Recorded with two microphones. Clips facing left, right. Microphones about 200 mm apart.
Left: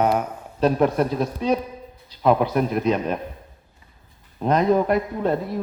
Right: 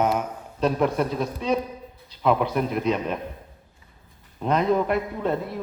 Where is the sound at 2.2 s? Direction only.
45° left (ahead or behind).